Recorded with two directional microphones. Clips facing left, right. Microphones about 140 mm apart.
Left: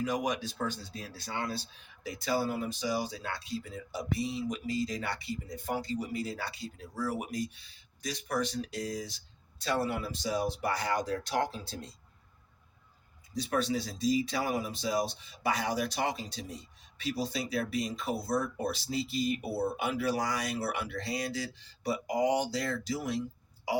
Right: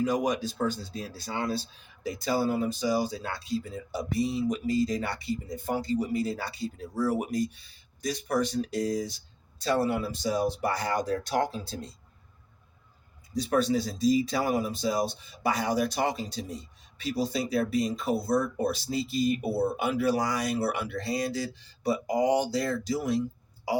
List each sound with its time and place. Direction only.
0.0 s speech: 35° right (ahead or behind)
13.3 s speech: 40° right (ahead or behind)